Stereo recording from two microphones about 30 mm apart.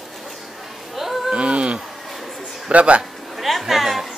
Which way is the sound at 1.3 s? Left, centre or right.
Right.